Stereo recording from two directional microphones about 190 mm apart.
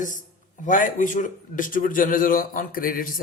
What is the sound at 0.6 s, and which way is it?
Speech, 45° left (ahead or behind).